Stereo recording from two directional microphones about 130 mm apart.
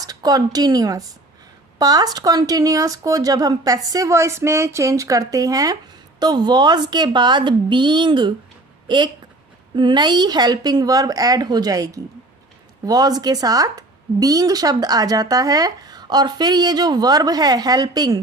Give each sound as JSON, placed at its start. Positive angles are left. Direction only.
{"t": 0.0, "sound": "a woman's voice", "side_deg": -30}